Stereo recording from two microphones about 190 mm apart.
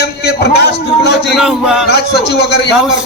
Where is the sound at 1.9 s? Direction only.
60° left (ahead or behind).